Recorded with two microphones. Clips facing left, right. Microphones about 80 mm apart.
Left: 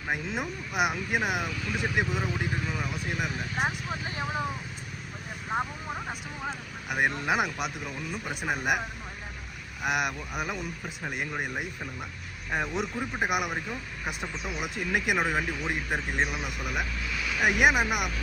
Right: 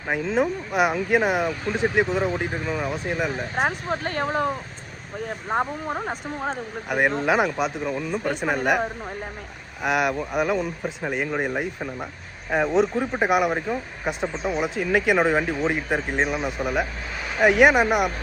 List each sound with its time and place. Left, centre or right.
0.3 s speech: right
4.0 s speech: right
5.5 s speech: right